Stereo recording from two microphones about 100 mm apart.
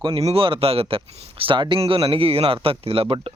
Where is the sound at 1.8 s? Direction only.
70° right (ahead or behind).